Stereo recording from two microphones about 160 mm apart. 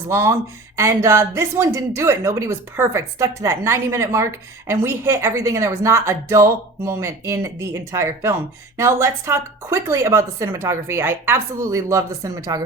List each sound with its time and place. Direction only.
0.1 s a woman's voice: 20° right (ahead or behind)